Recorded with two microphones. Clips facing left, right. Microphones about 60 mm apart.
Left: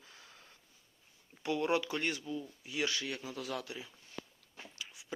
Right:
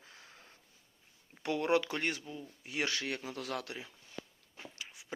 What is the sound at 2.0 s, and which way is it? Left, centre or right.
Speech, right.